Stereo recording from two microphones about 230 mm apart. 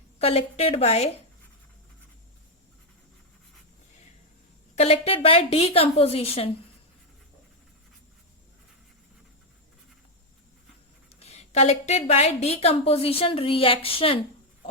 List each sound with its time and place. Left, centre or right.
0.2 s a woman's voice: left
4.7 s a woman's voice: left
11.1 s a woman's voice: left